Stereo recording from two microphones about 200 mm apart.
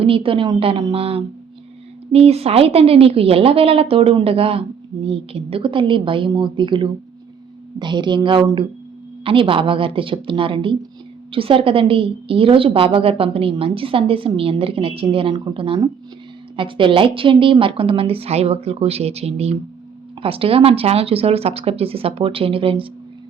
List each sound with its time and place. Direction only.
0.0 s a woman's voice: 25° right (ahead or behind)